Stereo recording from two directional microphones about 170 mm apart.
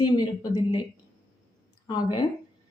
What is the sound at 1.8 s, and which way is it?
Speech, 25° left (ahead or behind).